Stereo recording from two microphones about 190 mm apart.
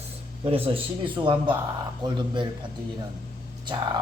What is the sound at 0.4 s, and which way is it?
A man's voice, 30° right (ahead or behind).